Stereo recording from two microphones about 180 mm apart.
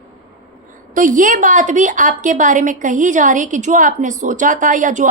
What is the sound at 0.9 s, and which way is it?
A woman's voice, 45° right (ahead or behind).